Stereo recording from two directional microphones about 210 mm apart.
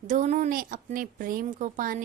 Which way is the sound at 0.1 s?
35° right (ahead or behind).